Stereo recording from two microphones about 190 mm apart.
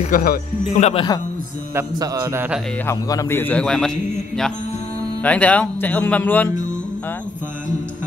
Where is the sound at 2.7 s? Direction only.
15° left (ahead or behind).